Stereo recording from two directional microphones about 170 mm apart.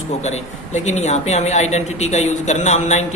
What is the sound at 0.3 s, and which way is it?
Speech, 40° left (ahead or behind).